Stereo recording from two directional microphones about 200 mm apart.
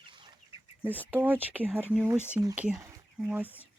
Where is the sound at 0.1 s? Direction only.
25° right (ahead or behind).